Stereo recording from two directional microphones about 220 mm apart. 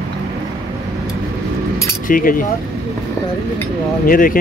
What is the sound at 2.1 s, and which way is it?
Speech, 40° left (ahead or behind).